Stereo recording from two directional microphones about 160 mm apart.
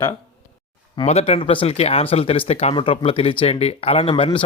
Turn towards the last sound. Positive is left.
turn(degrees=35)  # may be behind; listen again after turning